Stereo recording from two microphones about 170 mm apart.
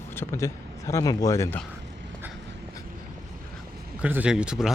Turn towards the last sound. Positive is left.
turn(degrees=-5)  # may be behind; listen again after turning